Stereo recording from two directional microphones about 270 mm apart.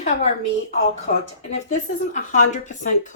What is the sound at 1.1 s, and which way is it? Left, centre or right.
Speech, left.